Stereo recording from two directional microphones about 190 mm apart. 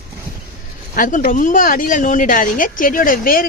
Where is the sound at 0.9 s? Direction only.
45° left (ahead or behind).